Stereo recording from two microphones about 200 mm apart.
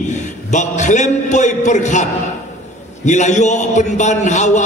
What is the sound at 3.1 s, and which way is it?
A man's voice, 35° left (ahead or behind).